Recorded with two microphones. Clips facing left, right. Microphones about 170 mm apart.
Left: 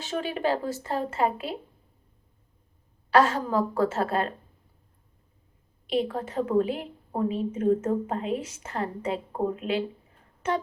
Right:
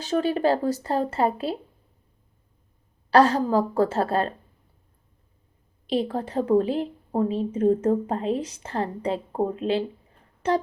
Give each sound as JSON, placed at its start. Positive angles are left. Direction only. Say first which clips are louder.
{"t": 0.0, "sound": "a woman's voice", "louder": "right 6 dB", "side_deg": -35}
{"t": 3.1, "sound": "a woman's voice", "louder": "right 4 dB", "side_deg": -35}
{"t": 5.9, "sound": "a woman's voice", "louder": "right 2 dB", "side_deg": -35}